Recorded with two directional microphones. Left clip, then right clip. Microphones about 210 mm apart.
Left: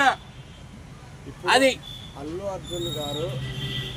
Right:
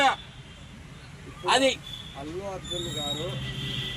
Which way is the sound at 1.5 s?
Centre (ahead or behind).